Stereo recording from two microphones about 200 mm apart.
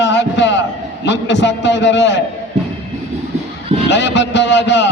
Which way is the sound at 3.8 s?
60° left (ahead or behind).